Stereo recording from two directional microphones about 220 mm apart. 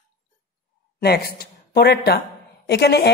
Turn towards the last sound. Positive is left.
turn(degrees=50)  # may be behind; listen again after turning